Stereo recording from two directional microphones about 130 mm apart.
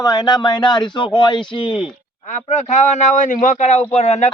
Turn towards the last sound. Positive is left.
turn(degrees=55)  # may be behind; listen again after turning